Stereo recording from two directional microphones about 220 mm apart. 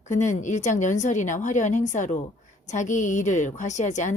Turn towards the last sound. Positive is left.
turn(degrees=35)  # may be behind; listen again after turning